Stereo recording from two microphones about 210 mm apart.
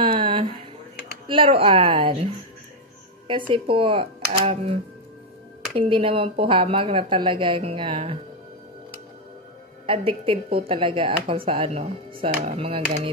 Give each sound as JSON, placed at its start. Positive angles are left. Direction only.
{"t": 0.0, "sound": "a sound", "side_deg": -25}
{"t": 1.2, "sound": "a woman's voice", "side_deg": -25}
{"t": 3.3, "sound": "a woman's voice", "side_deg": -25}
{"t": 5.8, "sound": "a woman's voice", "side_deg": -25}
{"t": 9.8, "sound": "a woman's voice", "side_deg": -25}